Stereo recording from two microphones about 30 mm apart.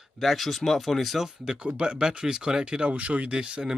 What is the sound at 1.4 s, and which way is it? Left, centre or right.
Speech, right.